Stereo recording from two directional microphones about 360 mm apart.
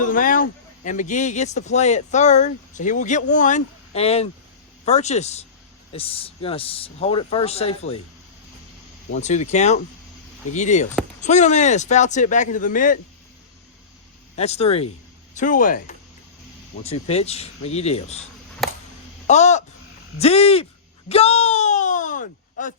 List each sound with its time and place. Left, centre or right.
0.0 s speech: left
9.1 s speech: centre
14.3 s speech: centre
18.6 s a sound: centre
19.3 s speech: centre
21.1 s a sound: centre